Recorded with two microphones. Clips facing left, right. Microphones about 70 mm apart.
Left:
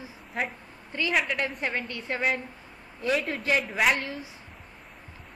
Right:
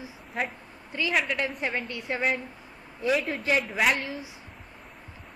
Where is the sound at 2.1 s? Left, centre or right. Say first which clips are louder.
Even; centre.